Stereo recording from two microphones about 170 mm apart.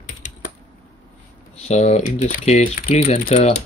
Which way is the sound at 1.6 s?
40° left (ahead or behind).